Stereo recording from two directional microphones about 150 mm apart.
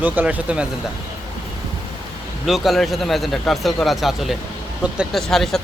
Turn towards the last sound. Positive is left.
turn(degrees=0)  # may be behind; listen again after turning